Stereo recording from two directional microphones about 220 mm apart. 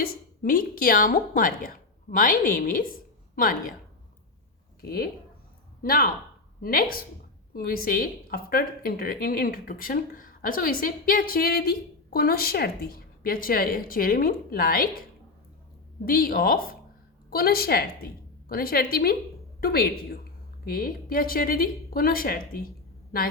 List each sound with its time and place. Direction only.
0.0 s speech: 40° left (ahead or behind)
4.8 s a woman's voice: 45° left (ahead or behind)
16.0 s a woman's voice: 40° left (ahead or behind)